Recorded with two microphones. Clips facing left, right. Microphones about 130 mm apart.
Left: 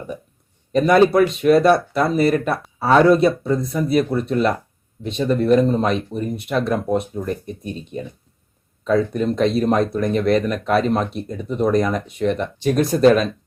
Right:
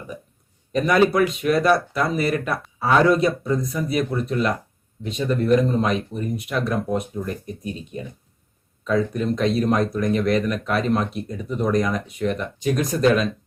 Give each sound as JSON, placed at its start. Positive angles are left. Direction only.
{"t": 0.7, "sound": "speech", "side_deg": 30}